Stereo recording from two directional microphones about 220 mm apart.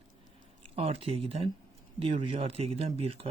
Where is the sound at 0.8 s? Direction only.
25° right (ahead or behind).